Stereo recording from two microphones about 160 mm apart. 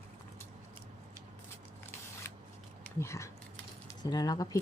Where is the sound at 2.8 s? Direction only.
15° left (ahead or behind).